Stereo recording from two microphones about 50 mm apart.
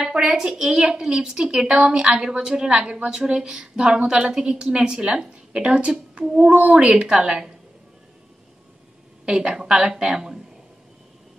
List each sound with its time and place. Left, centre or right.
0.0 s a woman's voice: centre
9.2 s a woman's voice: centre